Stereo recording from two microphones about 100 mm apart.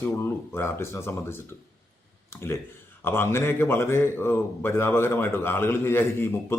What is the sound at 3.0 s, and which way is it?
A man's voice, 25° left (ahead or behind).